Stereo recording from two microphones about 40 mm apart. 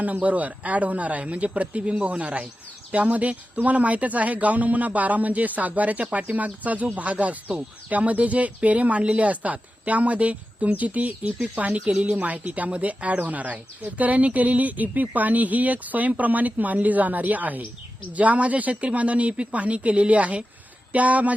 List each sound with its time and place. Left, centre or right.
0.0 s speech: right